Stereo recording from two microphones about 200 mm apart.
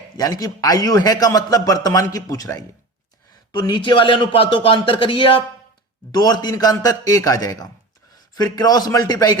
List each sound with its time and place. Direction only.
0.2 s a man's voice: 20° left (ahead or behind)